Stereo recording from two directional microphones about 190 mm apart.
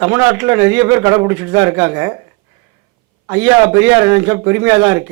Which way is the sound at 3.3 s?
10° right (ahead or behind).